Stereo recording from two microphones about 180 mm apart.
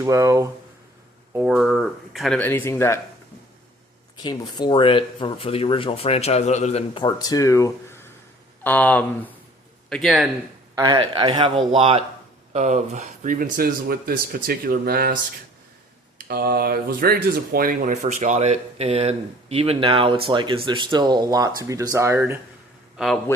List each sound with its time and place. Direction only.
0.0 s speech: 15° right (ahead or behind)
1.5 s speech: centre (ahead or behind)
2.4 s speech: 10° left (ahead or behind)
4.2 s speech: 25° left (ahead or behind); by 10.2 s centre (ahead or behind)
10.9 s speech: 25° right (ahead or behind)